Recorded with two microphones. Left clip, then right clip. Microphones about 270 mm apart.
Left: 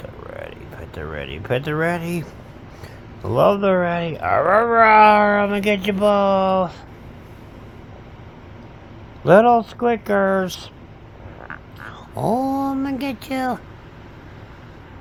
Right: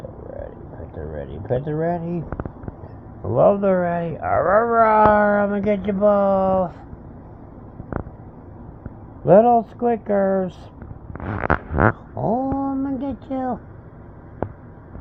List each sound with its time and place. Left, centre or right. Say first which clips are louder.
1.1 s speech: left 1 dB; left
1.7 s speech: left 2 dB; centre
3.2 s speech: even; left
9.2 s speech: left 1 dB; left
12.1 s a sound: left 2 dB; left